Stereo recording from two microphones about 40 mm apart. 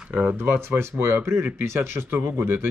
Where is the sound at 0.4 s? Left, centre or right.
Right.